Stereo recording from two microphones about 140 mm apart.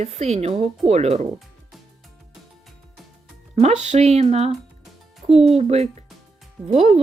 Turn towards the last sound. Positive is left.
turn(degrees=-50)  # may be behind; listen again after turning